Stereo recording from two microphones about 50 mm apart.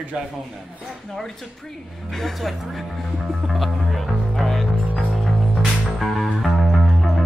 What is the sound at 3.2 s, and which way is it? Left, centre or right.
Music, centre.